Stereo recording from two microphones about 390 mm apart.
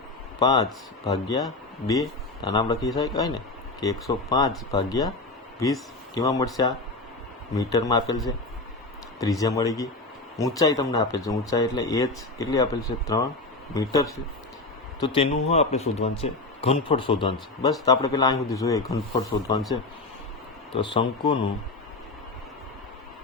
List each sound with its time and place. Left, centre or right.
0.3 s speech: centre
15.4 s speech: centre
20.7 s speech: centre